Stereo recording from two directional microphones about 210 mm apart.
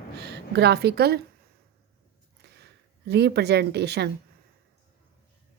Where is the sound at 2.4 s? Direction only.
50° right (ahead or behind).